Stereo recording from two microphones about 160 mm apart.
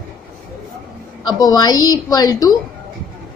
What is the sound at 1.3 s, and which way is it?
A woman's voice, 25° left (ahead or behind).